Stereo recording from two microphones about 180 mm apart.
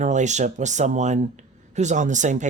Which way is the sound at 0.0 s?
40° right (ahead or behind).